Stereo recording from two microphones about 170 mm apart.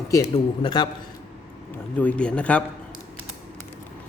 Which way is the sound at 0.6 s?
25° left (ahead or behind).